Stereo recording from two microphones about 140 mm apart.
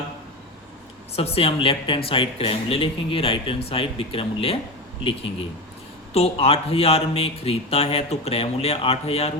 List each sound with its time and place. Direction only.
1.1 s speech: 45° left (ahead or behind)
6.1 s speech: 45° left (ahead or behind)